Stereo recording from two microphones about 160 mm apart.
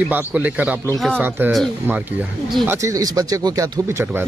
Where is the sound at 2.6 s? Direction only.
20° right (ahead or behind).